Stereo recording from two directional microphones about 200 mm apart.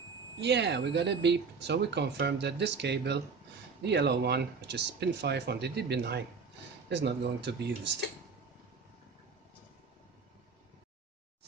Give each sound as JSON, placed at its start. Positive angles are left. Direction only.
{"t": 0.4, "sound": "speech", "side_deg": -60}